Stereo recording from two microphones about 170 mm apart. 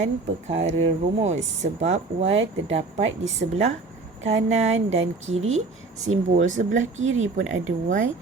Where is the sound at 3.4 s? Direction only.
55° right (ahead or behind).